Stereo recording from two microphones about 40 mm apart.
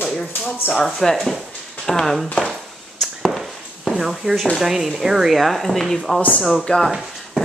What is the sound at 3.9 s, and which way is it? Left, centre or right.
Speech, centre.